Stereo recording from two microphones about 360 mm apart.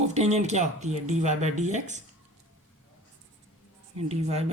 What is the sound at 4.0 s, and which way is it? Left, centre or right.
Speech, centre.